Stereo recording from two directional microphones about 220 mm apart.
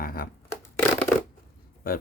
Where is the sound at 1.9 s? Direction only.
40° left (ahead or behind).